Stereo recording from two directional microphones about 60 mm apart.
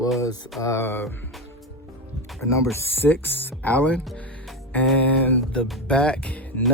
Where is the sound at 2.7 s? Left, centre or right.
Left.